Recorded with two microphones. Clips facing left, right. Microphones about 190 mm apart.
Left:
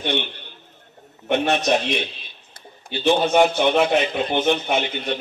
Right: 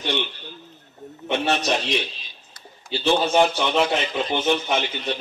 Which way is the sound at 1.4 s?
55° left (ahead or behind).